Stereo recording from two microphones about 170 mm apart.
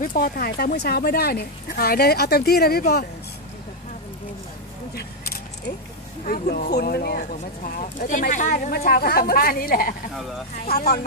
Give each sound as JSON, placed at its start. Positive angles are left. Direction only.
{"t": 0.0, "sound": "speech", "side_deg": 55}
{"t": 4.9, "sound": "vehicle", "side_deg": 65}
{"t": 6.2, "sound": "speech", "side_deg": 60}
{"t": 8.1, "sound": "speech", "side_deg": 50}